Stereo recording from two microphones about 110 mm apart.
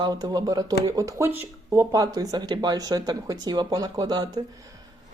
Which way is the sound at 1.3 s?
20° right (ahead or behind).